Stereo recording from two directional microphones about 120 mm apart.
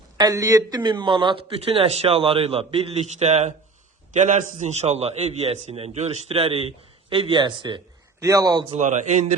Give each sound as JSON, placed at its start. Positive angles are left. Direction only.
{"t": 0.2, "sound": "a man's voice", "side_deg": -30}
{"t": 4.1, "sound": "a man's voice", "side_deg": -90}
{"t": 8.2, "sound": "speech", "side_deg": -30}
{"t": 8.7, "sound": "a man's voice", "side_deg": -85}